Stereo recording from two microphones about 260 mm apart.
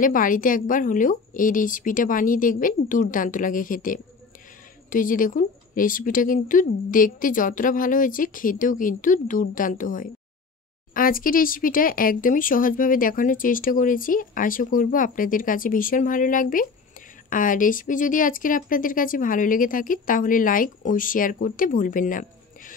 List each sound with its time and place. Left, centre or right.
0.0 s speech: left